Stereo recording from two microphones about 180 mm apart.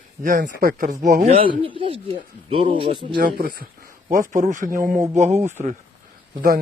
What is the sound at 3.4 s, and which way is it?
Speech, 55° right (ahead or behind).